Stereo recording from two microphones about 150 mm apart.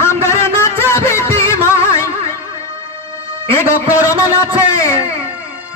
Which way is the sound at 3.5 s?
20° left (ahead or behind).